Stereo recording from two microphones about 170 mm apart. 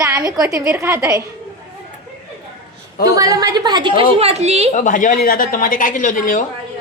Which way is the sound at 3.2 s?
20° right (ahead or behind).